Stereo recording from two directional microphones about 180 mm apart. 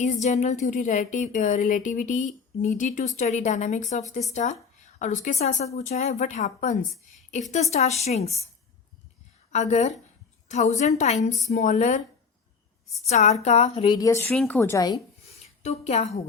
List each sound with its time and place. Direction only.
0.0 s a woman's voice: 40° left (ahead or behind)
9.5 s a woman's voice: 40° left (ahead or behind)
13.1 s a woman's voice: 40° left (ahead or behind); by 14.9 s 15° left (ahead or behind)
14.9 s a sound: 35° left (ahead or behind)